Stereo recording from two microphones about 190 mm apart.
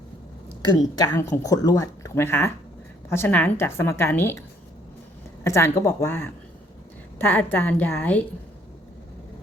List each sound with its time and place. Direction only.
0.9 s a woman's voice: 15° left (ahead or behind)